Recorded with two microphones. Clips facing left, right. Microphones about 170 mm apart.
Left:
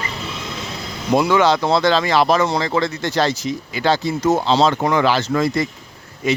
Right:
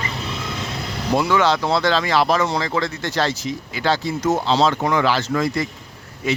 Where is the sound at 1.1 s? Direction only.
15° left (ahead or behind); by 5.6 s 30° left (ahead or behind).